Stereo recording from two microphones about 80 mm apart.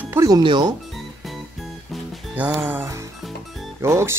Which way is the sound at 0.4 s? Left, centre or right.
Right.